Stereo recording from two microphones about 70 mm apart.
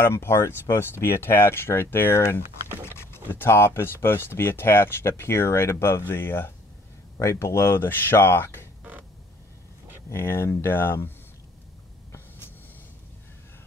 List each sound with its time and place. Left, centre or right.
0.0 s speech: left
10.0 s speech: left